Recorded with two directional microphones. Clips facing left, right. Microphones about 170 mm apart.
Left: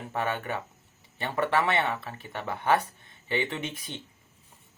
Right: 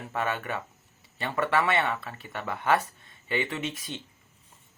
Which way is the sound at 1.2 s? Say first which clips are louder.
Even; 20° left (ahead or behind).